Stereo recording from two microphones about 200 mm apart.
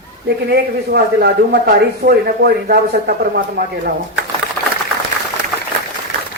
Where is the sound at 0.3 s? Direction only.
55° right (ahead or behind).